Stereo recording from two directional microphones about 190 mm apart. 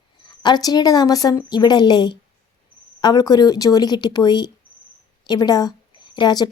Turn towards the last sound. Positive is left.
turn(degrees=25)  # may be behind; listen again after turning